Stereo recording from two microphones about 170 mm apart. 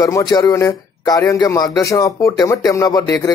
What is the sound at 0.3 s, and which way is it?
A man's voice, 20° left (ahead or behind).